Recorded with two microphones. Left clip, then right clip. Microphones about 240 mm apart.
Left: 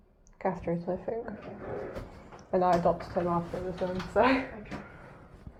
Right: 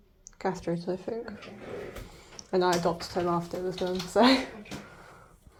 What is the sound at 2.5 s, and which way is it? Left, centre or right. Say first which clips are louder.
Speech: left 1 dB; right.